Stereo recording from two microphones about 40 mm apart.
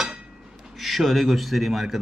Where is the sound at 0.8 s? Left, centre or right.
Centre.